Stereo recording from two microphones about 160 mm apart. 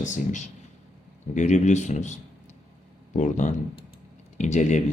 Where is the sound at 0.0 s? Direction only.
50° left (ahead or behind).